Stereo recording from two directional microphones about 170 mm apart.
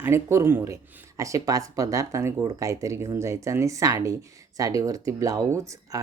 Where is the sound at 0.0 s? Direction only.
15° right (ahead or behind).